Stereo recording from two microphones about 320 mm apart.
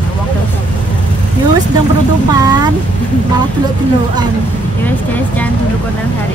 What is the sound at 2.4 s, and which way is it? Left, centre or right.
Speech, centre.